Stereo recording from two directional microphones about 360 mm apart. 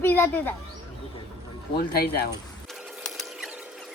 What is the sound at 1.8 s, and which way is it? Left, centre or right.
Speech, left.